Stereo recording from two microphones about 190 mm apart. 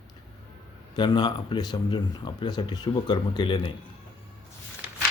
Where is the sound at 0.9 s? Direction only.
25° left (ahead or behind).